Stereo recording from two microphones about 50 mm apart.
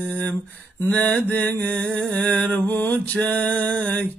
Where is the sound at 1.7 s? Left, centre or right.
Centre.